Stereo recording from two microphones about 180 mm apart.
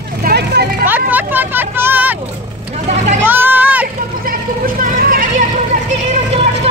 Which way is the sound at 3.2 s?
10° right (ahead or behind).